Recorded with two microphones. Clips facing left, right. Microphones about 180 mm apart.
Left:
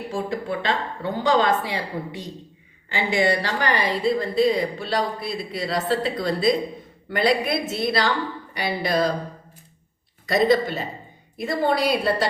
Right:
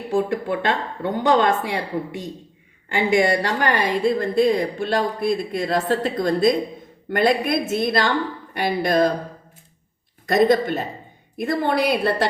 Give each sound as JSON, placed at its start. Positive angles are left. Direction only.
{"t": 0.1, "sound": "a woman's voice", "side_deg": -60}
{"t": 10.2, "sound": "a woman's voice", "side_deg": -50}